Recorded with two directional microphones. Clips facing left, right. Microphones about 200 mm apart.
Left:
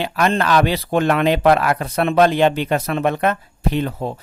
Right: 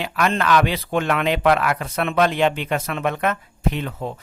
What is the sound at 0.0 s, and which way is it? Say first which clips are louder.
Speech: left 3 dB; 35° left (ahead or behind).